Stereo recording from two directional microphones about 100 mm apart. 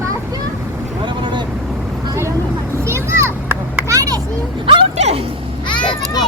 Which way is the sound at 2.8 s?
25° right (ahead or behind).